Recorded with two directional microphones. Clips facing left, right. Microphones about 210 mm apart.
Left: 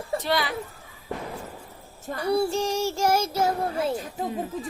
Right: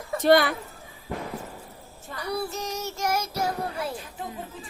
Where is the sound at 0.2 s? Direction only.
55° right (ahead or behind).